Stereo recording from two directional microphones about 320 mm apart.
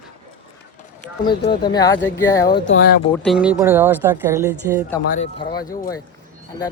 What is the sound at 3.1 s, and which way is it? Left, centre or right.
Speech, centre.